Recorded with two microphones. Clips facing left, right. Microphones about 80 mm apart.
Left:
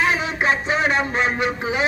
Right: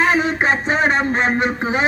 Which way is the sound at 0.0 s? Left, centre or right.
Right.